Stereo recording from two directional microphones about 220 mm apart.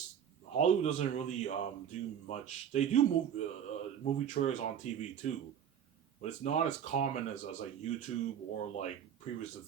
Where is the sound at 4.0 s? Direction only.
35° left (ahead or behind).